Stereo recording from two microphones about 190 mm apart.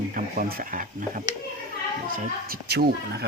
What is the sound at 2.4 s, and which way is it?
Speech, 55° right (ahead or behind).